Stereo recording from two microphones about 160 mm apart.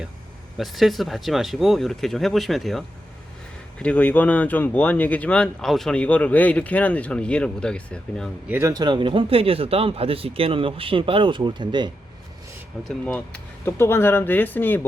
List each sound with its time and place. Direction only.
0.5 s speech: centre (ahead or behind)
8.4 s speech: 15° right (ahead or behind)
8.7 s speech: 30° right (ahead or behind)
13.1 s speech: 10° left (ahead or behind)